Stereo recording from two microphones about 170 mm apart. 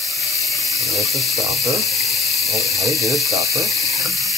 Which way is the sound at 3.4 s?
20° right (ahead or behind).